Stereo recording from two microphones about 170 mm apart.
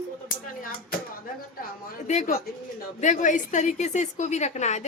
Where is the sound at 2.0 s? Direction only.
45° left (ahead or behind).